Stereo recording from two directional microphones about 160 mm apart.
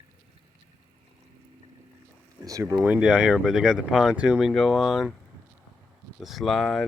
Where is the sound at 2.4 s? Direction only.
20° right (ahead or behind).